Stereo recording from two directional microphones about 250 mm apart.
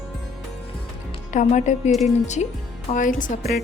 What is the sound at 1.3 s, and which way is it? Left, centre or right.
Speech, left.